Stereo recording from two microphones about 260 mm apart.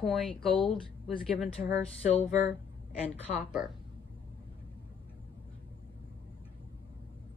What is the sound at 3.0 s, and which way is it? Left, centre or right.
Speech, centre.